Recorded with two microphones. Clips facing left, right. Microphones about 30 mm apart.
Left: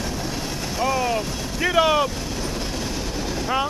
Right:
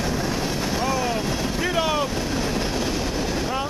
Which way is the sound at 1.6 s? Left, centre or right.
Centre.